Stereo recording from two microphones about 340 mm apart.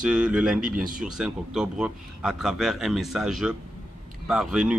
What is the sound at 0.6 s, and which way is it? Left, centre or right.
Speech, right.